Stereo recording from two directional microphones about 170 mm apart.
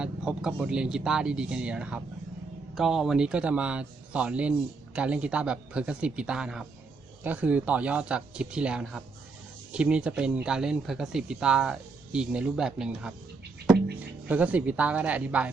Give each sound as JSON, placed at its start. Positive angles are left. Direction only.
{"t": 0.0, "sound": "speech", "side_deg": -5}
{"t": 13.7, "sound": "music", "side_deg": -75}
{"t": 14.3, "sound": "speech", "side_deg": -10}